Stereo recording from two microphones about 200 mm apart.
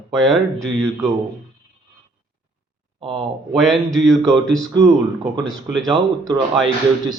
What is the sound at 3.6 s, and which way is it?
Speech, centre (ahead or behind).